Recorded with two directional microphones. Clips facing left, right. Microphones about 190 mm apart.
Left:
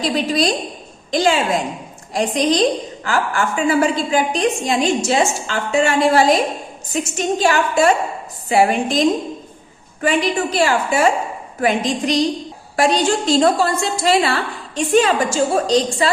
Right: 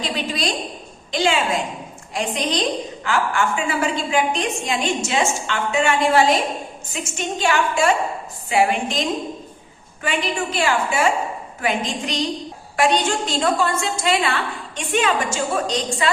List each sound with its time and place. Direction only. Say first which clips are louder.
0.0 s a woman's voice: left 7 dB; 40° left (ahead or behind)